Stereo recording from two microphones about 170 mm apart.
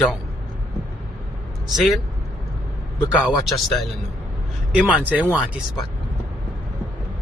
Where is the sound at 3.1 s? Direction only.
5° right (ahead or behind).